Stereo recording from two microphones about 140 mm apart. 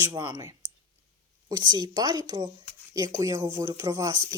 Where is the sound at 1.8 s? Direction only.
30° right (ahead or behind).